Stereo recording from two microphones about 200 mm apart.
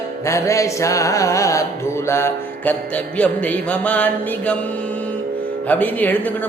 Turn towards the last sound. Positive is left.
turn(degrees=10)  # may be behind; listen again after turning